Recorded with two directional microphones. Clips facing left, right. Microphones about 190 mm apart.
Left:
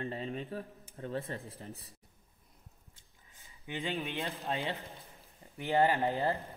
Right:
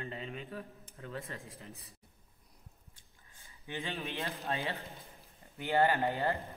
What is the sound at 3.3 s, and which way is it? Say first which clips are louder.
Speech: left 1 dB; 15° left (ahead or behind).